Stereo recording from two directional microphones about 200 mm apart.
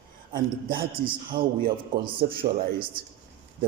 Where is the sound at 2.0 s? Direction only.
25° right (ahead or behind).